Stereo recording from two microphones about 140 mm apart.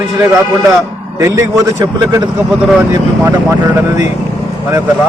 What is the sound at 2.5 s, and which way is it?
Speech, 5° right (ahead or behind).